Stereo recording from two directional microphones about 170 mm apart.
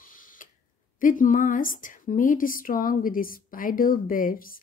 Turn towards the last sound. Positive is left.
turn(degrees=55)  # may be behind; listen again after turning